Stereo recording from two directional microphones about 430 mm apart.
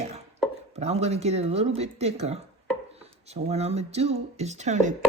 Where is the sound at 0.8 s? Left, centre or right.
Centre.